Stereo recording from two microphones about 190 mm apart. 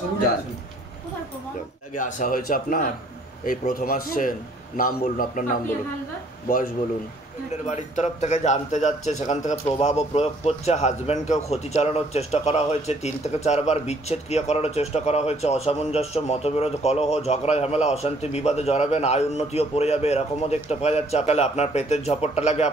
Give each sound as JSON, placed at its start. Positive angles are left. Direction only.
{"t": 2.0, "sound": "a man's voice", "side_deg": 40}
{"t": 7.6, "sound": "a man's voice", "side_deg": 40}